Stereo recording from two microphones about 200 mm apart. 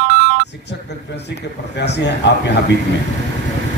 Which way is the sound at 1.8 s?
60° left (ahead or behind).